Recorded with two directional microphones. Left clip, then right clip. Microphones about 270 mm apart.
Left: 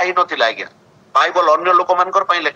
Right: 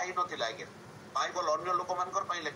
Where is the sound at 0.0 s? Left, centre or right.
Left.